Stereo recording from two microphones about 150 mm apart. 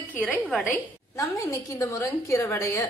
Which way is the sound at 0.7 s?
20° left (ahead or behind).